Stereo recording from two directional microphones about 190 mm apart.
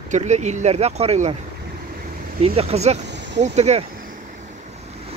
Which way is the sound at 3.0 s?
65° right (ahead or behind).